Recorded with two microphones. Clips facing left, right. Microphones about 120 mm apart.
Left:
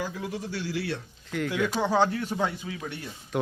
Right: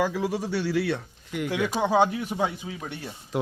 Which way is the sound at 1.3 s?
20° right (ahead or behind).